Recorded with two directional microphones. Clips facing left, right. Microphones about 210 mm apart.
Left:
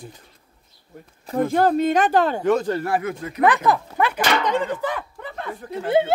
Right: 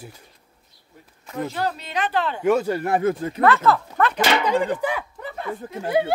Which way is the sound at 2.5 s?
10° right (ahead or behind).